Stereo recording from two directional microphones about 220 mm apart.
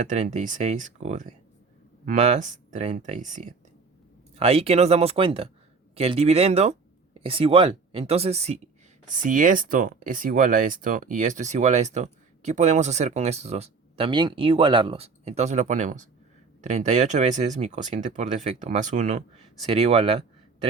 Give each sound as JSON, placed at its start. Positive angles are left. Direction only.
{"t": 0.0, "sound": "speech", "side_deg": -35}